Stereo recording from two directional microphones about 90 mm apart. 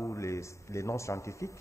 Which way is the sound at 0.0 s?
35° left (ahead or behind).